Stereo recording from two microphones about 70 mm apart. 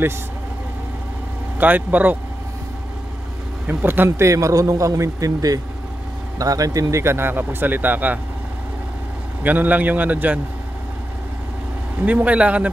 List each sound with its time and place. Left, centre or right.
1.6 s a man's voice: right
3.6 s a man's voice: right
4.2 s a man's voice: right
9.4 s a man's voice: right
12.0 s a man's voice: right